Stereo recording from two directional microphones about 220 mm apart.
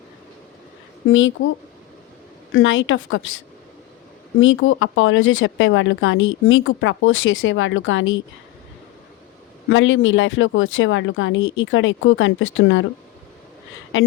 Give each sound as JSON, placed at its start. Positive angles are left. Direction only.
{"t": 1.0, "sound": "speech", "side_deg": 60}
{"t": 2.5, "sound": "speech", "side_deg": 60}
{"t": 4.4, "sound": "speech", "side_deg": 65}
{"t": 9.6, "sound": "speech", "side_deg": 65}